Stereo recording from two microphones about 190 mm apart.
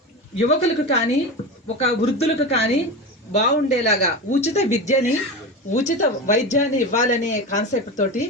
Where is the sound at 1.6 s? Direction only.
35° left (ahead or behind).